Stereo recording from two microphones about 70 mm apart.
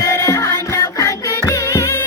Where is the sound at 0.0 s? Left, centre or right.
Left.